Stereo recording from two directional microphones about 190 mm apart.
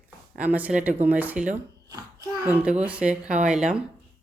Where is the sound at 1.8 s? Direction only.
20° right (ahead or behind).